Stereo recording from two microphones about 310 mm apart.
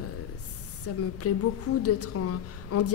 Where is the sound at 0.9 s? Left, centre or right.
Left.